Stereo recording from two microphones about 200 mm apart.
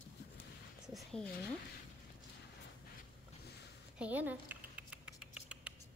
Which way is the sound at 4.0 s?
10° right (ahead or behind).